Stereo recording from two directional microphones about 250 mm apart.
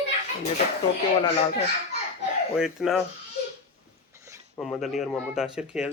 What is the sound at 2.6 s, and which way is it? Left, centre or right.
Speech, centre.